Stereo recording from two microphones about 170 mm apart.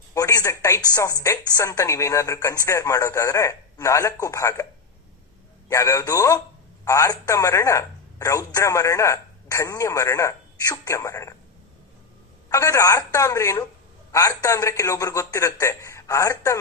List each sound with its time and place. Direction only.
0.1 s a sound: 20° left (ahead or behind)
1.2 s speech: 20° left (ahead or behind)
5.6 s a man's voice: 20° left (ahead or behind)
12.5 s a man's voice: 20° left (ahead or behind)